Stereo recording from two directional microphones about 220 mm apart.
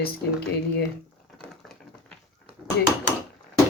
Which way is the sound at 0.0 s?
45° left (ahead or behind).